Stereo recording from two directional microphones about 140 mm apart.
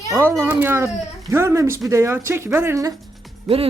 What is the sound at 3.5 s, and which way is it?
Speech, centre (ahead or behind).